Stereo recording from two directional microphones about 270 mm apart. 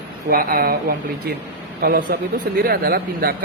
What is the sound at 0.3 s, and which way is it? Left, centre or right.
Speech, right.